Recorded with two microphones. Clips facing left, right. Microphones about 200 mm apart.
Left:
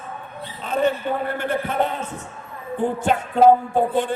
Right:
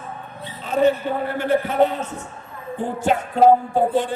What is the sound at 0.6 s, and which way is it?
A man's voice, 55° left (ahead or behind).